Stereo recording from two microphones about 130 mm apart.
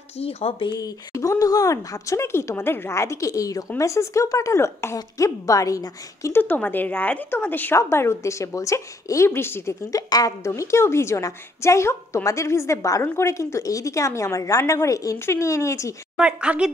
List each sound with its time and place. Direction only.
0.2 s speech: 45° left (ahead or behind)
0.7 s a woman's voice: 25° left (ahead or behind)
6.4 s a woman's voice: 10° left (ahead or behind)
16.2 s a woman's voice: 10° right (ahead or behind)